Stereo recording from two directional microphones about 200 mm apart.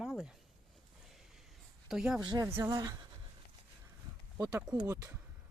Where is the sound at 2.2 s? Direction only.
20° right (ahead or behind).